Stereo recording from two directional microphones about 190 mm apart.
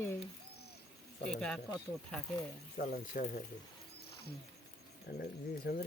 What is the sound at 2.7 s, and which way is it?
Speech, 50° left (ahead or behind).